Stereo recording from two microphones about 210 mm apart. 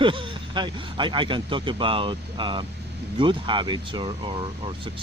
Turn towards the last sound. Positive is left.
turn(degrees=-25)  # may be behind; listen again after turning